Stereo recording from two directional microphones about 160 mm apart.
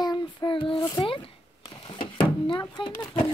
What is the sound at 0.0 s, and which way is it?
Child singing, 25° left (ahead or behind).